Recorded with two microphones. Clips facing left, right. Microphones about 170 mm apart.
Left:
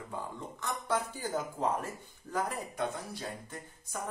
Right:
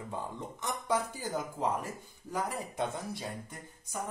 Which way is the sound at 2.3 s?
20° right (ahead or behind).